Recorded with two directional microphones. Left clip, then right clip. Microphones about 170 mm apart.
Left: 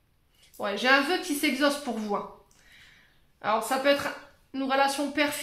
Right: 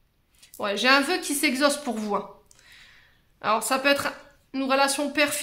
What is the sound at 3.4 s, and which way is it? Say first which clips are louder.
Speech: right 3 dB; 35° right (ahead or behind).